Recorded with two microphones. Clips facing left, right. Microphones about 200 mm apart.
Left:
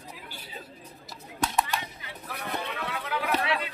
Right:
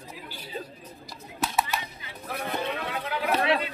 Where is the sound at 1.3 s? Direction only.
5° right (ahead or behind).